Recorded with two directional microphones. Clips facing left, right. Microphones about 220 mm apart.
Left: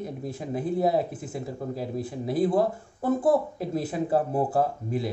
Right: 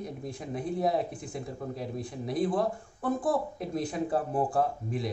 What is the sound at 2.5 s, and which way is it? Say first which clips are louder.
Speech: left 5 dB; 25° left (ahead or behind).